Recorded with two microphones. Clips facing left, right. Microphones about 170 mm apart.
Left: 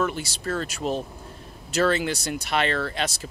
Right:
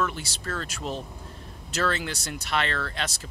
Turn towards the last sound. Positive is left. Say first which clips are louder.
# left 4 dB
turn(degrees=15)  # may be behind; listen again after turning